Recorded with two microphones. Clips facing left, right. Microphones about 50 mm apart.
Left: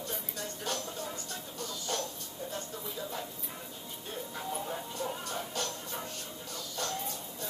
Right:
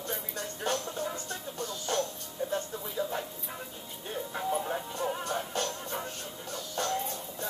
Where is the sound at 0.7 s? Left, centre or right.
Right.